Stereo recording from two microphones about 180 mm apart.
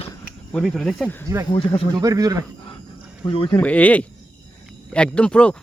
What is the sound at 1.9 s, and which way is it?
Speech, 20° right (ahead or behind).